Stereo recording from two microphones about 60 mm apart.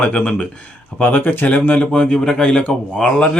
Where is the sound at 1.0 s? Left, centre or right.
Left.